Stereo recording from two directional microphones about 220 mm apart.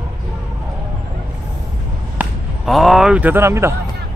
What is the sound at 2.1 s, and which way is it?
Speech, centre (ahead or behind).